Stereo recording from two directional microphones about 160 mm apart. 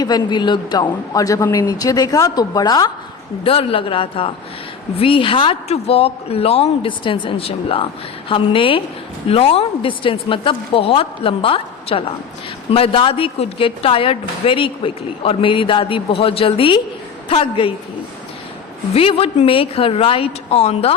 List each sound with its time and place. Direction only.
0.0 s a woman's voice: 25° left (ahead or behind)
3.4 s a woman's voice: 35° left (ahead or behind)
18.9 s a woman's voice: 35° left (ahead or behind)